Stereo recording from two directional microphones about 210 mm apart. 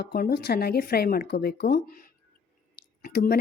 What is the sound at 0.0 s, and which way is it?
A woman's voice, 45° left (ahead or behind).